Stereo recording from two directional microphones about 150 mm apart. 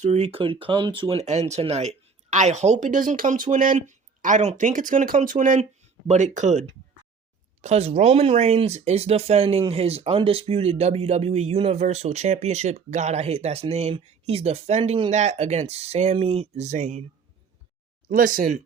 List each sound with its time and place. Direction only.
0.0 s speech: 45° right (ahead or behind)
1.2 s speech: 50° right (ahead or behind)
18.1 s speech: 65° right (ahead or behind)